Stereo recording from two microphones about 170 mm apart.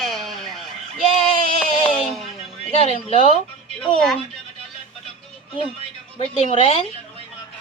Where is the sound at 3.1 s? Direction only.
35° left (ahead or behind).